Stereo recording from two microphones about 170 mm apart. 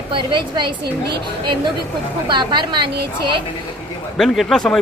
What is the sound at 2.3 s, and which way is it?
Speech, 25° right (ahead or behind).